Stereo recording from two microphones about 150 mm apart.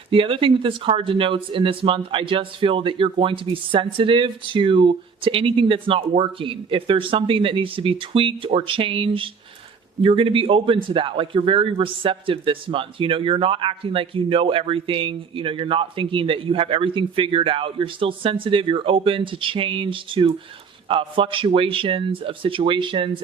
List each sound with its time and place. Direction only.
0.1 s a man's voice: 35° right (ahead or behind)